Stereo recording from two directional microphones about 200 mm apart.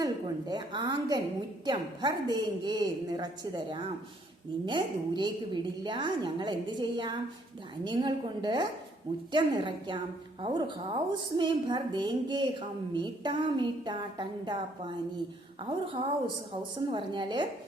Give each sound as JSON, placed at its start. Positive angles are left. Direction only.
{"t": 0.0, "sound": "a woman's voice", "side_deg": -20}
{"t": 16.0, "sound": "a woman's voice", "side_deg": -25}